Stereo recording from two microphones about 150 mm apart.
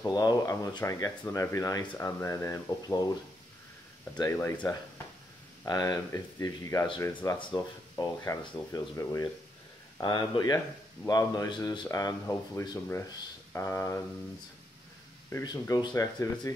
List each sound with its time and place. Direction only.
0.0 s speech: 25° left (ahead or behind)
4.1 s speech: 20° left (ahead or behind)
5.7 s speech: 25° left (ahead or behind)
7.3 s speech: 35° left (ahead or behind)
7.9 s speech: 20° left (ahead or behind)
15.6 s speech: 25° left (ahead or behind)